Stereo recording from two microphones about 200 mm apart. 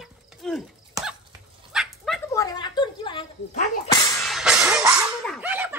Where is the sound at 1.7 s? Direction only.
Centre (ahead or behind).